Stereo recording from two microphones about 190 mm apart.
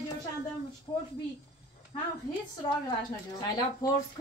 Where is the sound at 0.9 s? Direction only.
20° left (ahead or behind).